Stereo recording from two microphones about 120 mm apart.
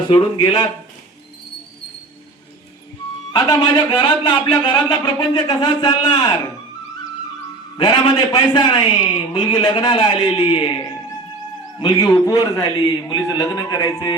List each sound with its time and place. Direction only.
0.1 s speech: 45° left (ahead or behind)
3.3 s speech: 35° left (ahead or behind)
7.8 s speech: 35° left (ahead or behind)
11.8 s speech: 40° left (ahead or behind)